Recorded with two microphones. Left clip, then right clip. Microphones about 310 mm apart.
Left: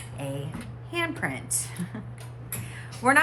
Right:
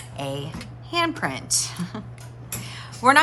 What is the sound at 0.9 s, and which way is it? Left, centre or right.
Speech, centre.